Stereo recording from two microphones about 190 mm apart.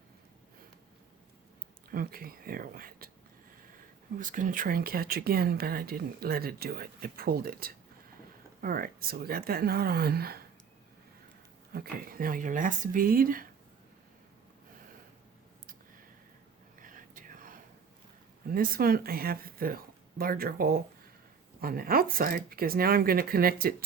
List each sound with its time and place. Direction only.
1.9 s speech: 50° right (ahead or behind)
4.2 s speech: 45° right (ahead or behind)
11.7 s speech: 50° right (ahead or behind)
16.8 s whispering: 45° right (ahead or behind)
18.4 s speech: 50° right (ahead or behind)